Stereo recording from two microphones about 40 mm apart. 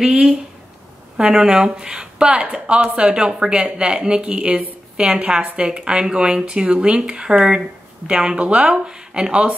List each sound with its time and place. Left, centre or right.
0.0 s speech: centre